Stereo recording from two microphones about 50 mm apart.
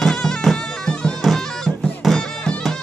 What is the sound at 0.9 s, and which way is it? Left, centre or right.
Bagpipes, left.